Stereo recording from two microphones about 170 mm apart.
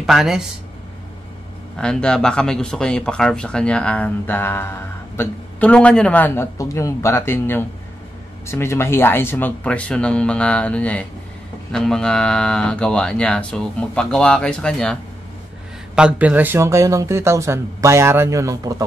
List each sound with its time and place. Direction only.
0.0 s speech: centre (ahead or behind)
1.8 s speech: 5° left (ahead or behind)
16.0 s speech: 10° right (ahead or behind)